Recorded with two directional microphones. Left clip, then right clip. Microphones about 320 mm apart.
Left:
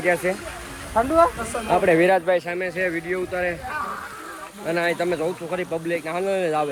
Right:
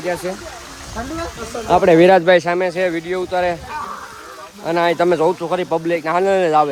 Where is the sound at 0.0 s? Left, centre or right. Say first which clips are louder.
Left 1 dB; centre.